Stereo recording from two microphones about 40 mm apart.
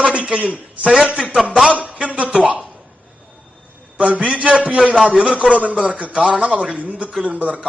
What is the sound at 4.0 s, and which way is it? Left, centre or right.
A man's voice, right.